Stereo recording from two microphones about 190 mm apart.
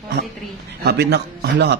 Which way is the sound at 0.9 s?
60° right (ahead or behind).